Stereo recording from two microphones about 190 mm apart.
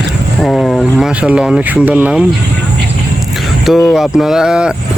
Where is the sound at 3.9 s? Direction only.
Centre (ahead or behind).